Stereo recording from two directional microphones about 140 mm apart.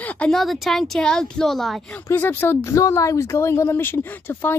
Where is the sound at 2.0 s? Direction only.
15° left (ahead or behind).